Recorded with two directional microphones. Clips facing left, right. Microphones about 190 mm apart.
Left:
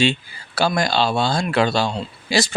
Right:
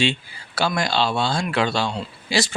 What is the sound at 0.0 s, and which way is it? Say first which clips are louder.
Speech: left 3 dB; 40° left (ahead or behind).